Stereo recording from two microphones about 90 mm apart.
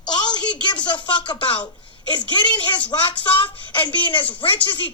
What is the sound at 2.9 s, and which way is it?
A woman's voice, 65° left (ahead or behind).